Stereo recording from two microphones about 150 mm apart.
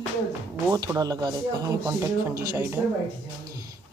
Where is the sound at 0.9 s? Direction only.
25° right (ahead or behind).